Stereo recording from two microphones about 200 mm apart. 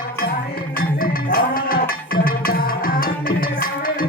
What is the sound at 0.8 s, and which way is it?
Music, 45° left (ahead or behind).